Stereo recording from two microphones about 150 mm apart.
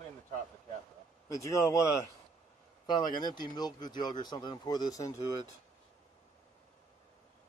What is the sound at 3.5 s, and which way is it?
Speech, 30° left (ahead or behind).